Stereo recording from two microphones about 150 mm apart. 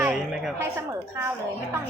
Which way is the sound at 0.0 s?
5° right (ahead or behind).